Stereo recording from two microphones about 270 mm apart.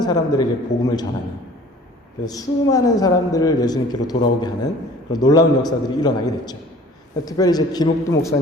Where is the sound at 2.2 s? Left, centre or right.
Centre.